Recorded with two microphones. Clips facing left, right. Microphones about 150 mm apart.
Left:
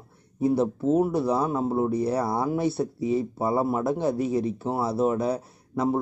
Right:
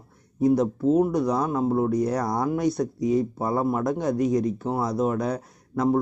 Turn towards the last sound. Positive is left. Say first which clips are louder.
# right 2 dB
turn(degrees=5)  # may be behind; listen again after turning